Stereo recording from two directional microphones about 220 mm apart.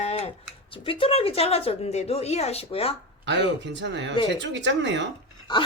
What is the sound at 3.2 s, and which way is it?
Speech, 55° right (ahead or behind).